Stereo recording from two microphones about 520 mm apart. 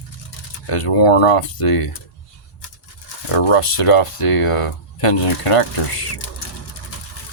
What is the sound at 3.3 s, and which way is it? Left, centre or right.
Speech, left.